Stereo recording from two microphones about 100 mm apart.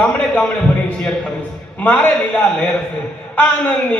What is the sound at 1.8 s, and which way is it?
A man's voice, 15° left (ahead or behind).